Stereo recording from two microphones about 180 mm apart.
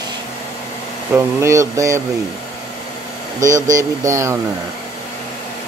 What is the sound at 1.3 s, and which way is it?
Speech, 15° right (ahead or behind).